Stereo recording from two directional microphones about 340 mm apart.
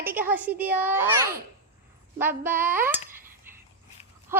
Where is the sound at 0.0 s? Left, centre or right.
Centre.